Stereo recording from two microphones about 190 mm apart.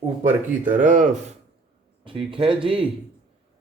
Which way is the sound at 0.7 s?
40° right (ahead or behind).